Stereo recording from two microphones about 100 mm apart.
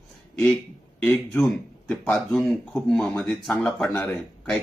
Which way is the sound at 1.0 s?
15° left (ahead or behind).